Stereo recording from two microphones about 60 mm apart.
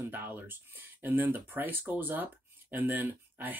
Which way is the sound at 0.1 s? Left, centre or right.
Right.